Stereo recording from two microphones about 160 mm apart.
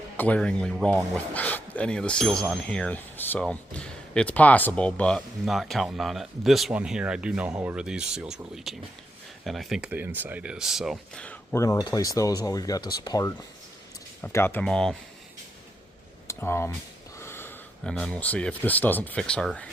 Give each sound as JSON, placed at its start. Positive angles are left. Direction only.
{"t": 0.2, "sound": "speech", "side_deg": 5}
{"t": 16.2, "sound": "a sound", "side_deg": 15}
{"t": 17.9, "sound": "speech", "side_deg": 5}